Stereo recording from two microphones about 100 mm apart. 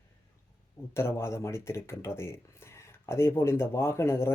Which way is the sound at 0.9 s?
25° left (ahead or behind).